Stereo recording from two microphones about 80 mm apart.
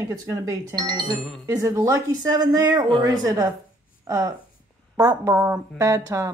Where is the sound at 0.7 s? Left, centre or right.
Right.